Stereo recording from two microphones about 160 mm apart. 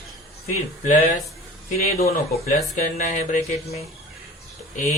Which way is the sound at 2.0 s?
60° left (ahead or behind).